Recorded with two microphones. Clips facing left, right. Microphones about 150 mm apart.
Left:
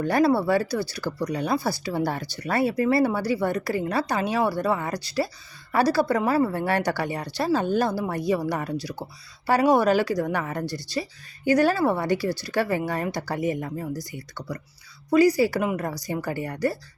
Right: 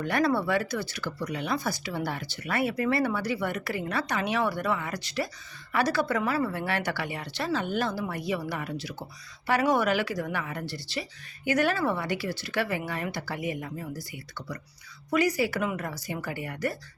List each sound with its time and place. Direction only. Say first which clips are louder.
0.0 s speech: left 5 dB; 35° left (ahead or behind)